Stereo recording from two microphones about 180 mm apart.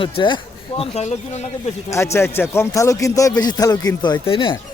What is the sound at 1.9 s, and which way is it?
A man's voice, 15° left (ahead or behind).